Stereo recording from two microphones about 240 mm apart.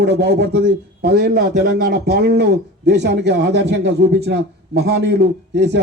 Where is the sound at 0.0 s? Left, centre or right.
Right.